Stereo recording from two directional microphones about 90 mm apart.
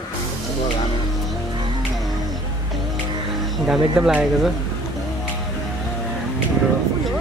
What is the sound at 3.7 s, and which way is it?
Speech, 10° right (ahead or behind).